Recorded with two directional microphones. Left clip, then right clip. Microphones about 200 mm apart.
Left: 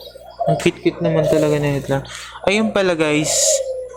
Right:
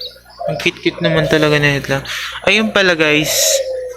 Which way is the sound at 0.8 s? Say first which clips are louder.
Right 2 dB; 5° left (ahead or behind).